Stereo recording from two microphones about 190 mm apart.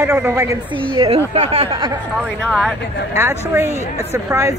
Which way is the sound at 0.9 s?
25° right (ahead or behind).